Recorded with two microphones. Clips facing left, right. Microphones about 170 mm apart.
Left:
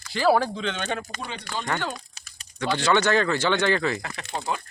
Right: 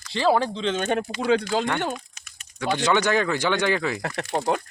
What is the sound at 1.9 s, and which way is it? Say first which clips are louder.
Typing: right 3 dB; 35° left (ahead or behind).